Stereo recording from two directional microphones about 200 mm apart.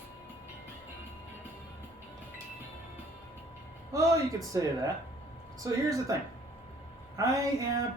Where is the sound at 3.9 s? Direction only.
15° right (ahead or behind).